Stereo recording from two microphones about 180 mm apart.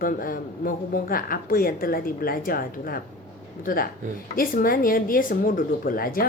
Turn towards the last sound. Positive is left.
turn(degrees=55)  # may be behind; listen again after turning